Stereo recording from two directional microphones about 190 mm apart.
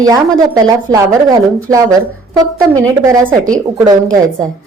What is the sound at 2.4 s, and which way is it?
Speech, 20° right (ahead or behind).